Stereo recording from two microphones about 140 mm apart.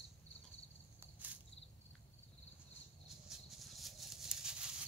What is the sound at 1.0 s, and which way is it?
Cricket, 10° right (ahead or behind).